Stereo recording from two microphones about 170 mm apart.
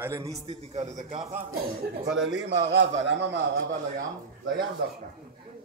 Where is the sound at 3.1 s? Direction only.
90° right; by 4.0 s 70° right (ahead or behind).